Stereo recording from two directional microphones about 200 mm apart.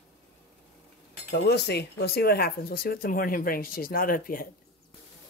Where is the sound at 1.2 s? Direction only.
55° left (ahead or behind).